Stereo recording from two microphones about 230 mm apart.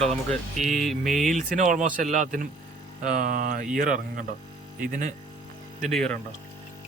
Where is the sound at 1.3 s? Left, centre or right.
Right.